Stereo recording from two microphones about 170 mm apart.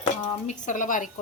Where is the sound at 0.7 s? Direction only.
50° left (ahead or behind).